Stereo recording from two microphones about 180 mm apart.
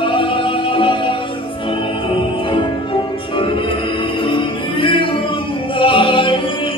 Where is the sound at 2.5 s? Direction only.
30° left (ahead or behind).